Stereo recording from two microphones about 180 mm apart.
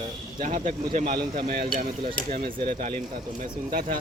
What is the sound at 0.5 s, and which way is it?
Speech, 40° right (ahead or behind).